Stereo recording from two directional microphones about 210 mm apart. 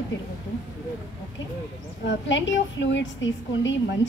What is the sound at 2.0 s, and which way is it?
A woman's voice, 60° left (ahead or behind).